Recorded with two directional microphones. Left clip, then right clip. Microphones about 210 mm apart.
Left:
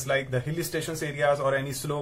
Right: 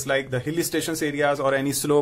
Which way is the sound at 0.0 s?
50° right (ahead or behind).